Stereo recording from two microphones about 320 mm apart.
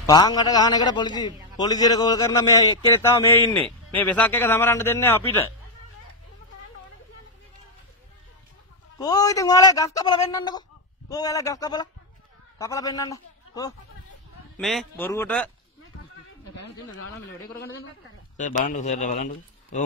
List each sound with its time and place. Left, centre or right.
0.0 s a man's voice: centre
8.9 s a man's voice: centre
16.5 s speech: left
18.4 s speech: left